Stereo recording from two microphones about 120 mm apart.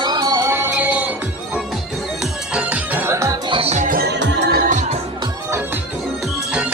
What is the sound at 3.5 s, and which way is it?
Music, 50° right (ahead or behind).